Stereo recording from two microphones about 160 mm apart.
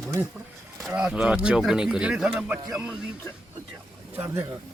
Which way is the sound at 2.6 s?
20° right (ahead or behind).